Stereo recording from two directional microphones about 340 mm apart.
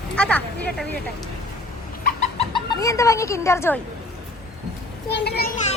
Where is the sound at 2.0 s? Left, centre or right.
Centre.